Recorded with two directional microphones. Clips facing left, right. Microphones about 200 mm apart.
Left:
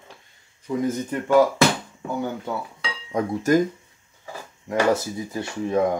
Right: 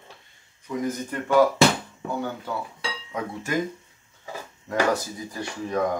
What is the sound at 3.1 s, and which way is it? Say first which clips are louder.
Speech: left 10 dB; 40° left (ahead or behind).